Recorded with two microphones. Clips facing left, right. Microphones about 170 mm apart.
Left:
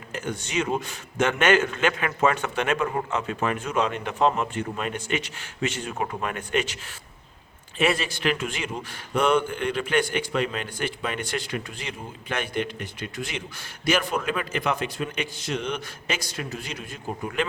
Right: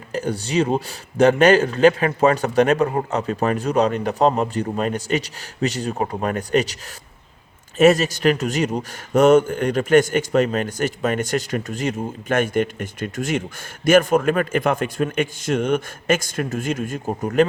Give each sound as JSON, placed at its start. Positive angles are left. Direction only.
{"t": 0.1, "sound": "speech", "side_deg": -35}
{"t": 7.8, "sound": "a man's voice", "side_deg": -45}